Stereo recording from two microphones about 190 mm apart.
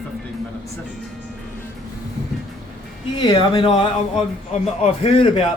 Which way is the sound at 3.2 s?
25° left (ahead or behind).